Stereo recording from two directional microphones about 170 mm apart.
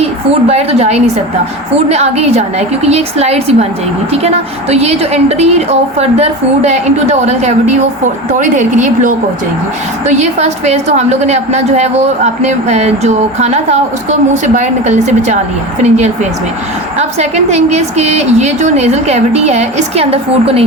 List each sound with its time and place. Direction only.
0.0 s a woman's voice: 35° right (ahead or behind)